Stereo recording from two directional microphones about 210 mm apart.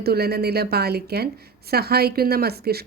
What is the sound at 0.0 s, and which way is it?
A woman's voice, 50° right (ahead or behind).